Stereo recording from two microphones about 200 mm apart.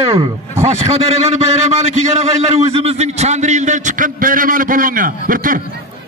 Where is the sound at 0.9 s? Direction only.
30° right (ahead or behind).